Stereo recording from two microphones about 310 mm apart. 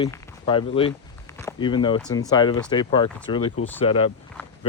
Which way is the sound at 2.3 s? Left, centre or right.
Centre.